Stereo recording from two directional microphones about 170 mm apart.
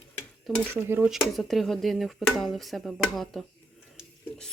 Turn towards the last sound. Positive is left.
turn(degrees=5)  # may be behind; listen again after turning